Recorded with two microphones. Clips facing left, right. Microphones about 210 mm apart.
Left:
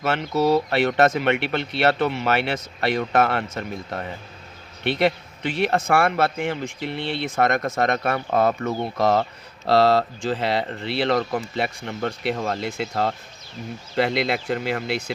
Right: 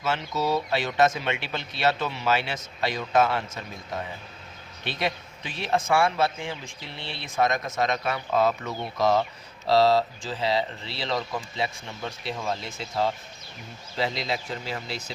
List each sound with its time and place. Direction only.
0.0 s speech: 60° left (ahead or behind)